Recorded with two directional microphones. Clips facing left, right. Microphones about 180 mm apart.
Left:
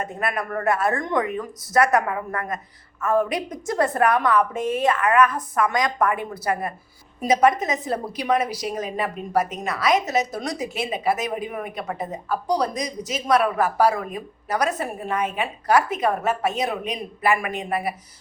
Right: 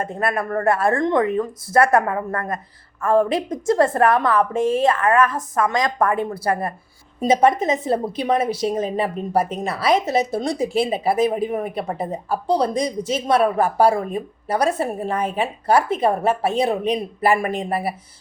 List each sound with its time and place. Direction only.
0.0 s a woman's voice: 30° right (ahead or behind)